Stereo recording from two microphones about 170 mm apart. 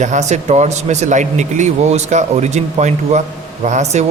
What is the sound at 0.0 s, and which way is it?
Speech, 45° right (ahead or behind).